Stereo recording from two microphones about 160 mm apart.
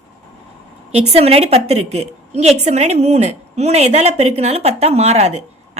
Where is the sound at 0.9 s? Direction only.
40° right (ahead or behind).